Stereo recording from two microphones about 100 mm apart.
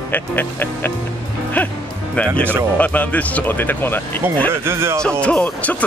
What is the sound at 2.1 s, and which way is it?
Speech, 15° left (ahead or behind).